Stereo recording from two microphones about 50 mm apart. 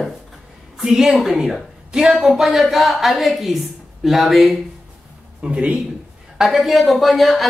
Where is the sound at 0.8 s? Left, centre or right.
Centre.